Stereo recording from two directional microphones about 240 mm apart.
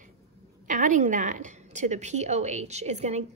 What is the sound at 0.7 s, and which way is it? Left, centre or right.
A woman's voice, right.